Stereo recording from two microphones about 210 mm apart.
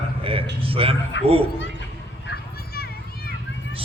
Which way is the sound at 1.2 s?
60° left (ahead or behind).